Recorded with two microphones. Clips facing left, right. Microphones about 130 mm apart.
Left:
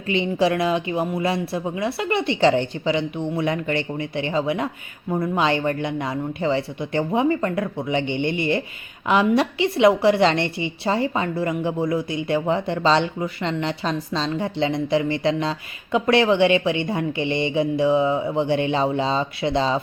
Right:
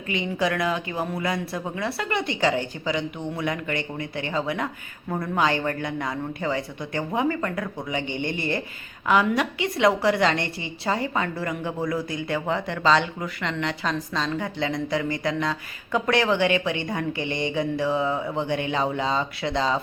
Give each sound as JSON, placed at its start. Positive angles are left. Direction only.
{"t": 0.1, "sound": "a woman's voice", "side_deg": 25}